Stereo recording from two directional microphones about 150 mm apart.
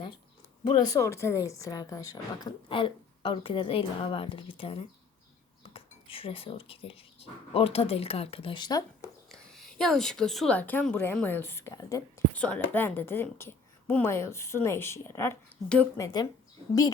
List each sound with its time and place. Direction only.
0.6 s speech: 30° left (ahead or behind)
2.6 s speech: 35° left (ahead or behind)
9.3 s a woman's voice: 5° left (ahead or behind); by 12.2 s 20° left (ahead or behind)
12.3 s a woman's voice: 10° left (ahead or behind)